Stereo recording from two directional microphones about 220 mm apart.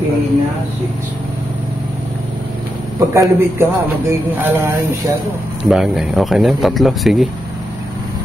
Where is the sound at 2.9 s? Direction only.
15° right (ahead or behind).